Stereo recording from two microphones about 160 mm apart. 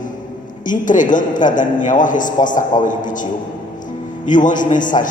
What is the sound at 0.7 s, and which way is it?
A man's voice, 55° left (ahead or behind).